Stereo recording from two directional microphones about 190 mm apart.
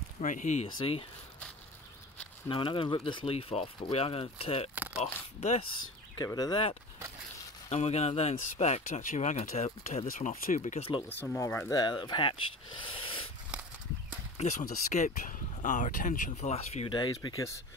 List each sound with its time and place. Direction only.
0.2 s speech: 40° left (ahead or behind)
0.7 s speech: 25° left (ahead or behind)
2.5 s speech: 25° left (ahead or behind)
4.7 s a sound: 10° right (ahead or behind)
5.0 s speech: 35° left (ahead or behind)
6.1 s speech: 20° left (ahead or behind)
7.7 s speech: 35° left (ahead or behind)
11.1 s speech: 10° left (ahead or behind)
11.8 s speech: 25° left (ahead or behind)
12.7 s a sound: 25° left (ahead or behind)
14.3 s a sound: 35° left (ahead or behind)
14.6 s speech: 50° left (ahead or behind)
15.0 s speech: 40° left (ahead or behind); by 17.6 s 20° left (ahead or behind)